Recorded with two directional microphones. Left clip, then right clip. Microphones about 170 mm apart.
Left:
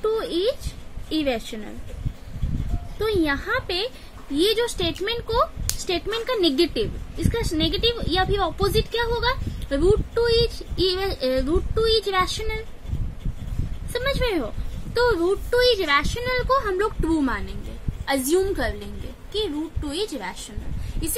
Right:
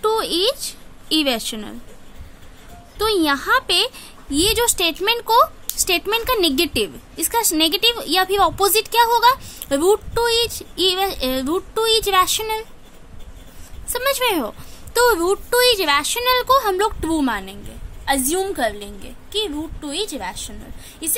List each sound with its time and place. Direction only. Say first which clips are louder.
0.0 s a woman's voice: right 4 dB; 60° right (ahead or behind)
3.0 s a woman's voice: right 5 dB; 65° right (ahead or behind)
13.9 s a woman's voice: right 5 dB; 65° right (ahead or behind); by 17.4 s 50° right (ahead or behind)
18.0 s a woman's voice: right 1 dB; 40° right (ahead or behind)